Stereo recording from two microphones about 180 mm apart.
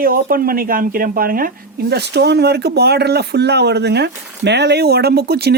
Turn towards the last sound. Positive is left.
turn(degrees=-60)  # may be behind; listen again after turning